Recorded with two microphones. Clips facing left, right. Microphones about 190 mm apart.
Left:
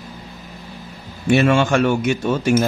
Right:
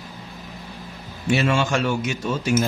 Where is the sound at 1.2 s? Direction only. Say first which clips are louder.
Left 6 dB; 55° left (ahead or behind).